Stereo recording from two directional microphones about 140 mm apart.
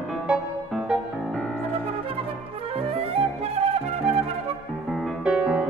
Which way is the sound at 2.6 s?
45° right (ahead or behind).